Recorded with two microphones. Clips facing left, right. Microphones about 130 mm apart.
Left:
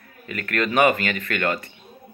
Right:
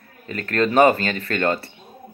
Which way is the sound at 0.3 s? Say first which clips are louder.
Right 4 dB; 30° right (ahead or behind).